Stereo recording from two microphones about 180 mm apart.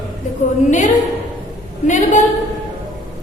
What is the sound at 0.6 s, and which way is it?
A woman's voice, 45° left (ahead or behind).